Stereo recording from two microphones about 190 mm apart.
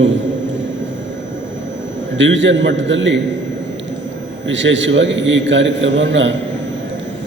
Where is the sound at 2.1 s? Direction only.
75° right (ahead or behind).